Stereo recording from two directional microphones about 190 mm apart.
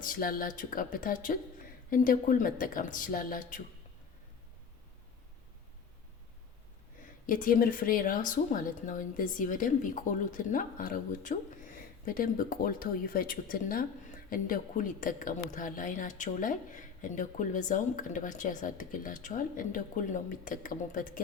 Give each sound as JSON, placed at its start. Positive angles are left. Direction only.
{"t": 0.0, "sound": "speech", "side_deg": 45}
{"t": 7.3, "sound": "speech", "side_deg": 45}